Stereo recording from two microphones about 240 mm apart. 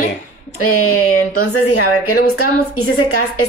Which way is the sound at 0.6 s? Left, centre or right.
Left.